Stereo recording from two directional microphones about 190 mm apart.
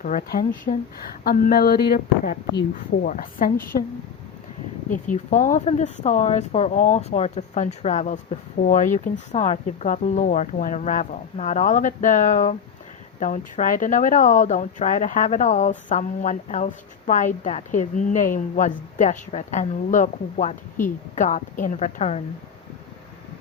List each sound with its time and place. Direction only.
0.0 s a woman's voice: 45° left (ahead or behind); by 3.1 s 65° left (ahead or behind)
3.1 s a woman's voice: 45° left (ahead or behind)
4.9 s speech: 45° left (ahead or behind)